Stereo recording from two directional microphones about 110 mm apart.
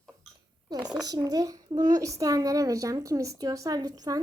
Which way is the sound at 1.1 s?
35° right (ahead or behind).